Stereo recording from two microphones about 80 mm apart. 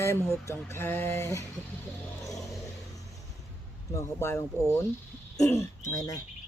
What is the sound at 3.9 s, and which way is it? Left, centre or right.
Speech, left.